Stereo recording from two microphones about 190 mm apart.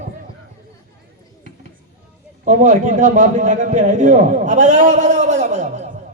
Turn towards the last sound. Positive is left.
turn(degrees=-40)  # may be behind; listen again after turning